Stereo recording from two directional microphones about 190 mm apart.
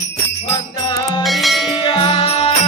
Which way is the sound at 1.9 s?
30° left (ahead or behind).